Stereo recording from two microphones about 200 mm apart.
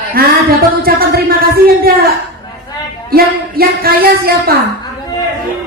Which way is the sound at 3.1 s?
50° right (ahead or behind).